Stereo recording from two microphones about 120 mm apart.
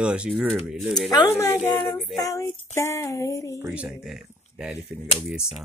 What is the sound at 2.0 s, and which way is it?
Speech, centre (ahead or behind).